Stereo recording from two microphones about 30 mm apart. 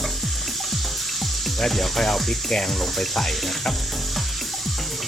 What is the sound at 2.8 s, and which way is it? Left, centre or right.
Speech, centre.